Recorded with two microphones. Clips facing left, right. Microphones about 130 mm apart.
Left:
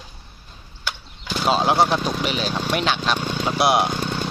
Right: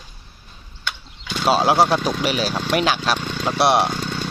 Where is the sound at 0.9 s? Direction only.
5° left (ahead or behind).